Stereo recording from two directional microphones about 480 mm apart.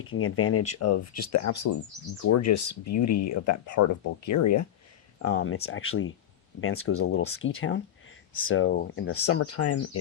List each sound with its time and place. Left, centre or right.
0.1 s speech: left